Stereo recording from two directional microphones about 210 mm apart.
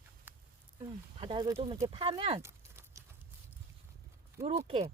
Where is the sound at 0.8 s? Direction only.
20° right (ahead or behind).